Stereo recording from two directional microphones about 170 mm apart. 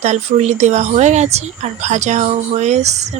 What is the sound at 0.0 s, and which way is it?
Speech, 40° right (ahead or behind).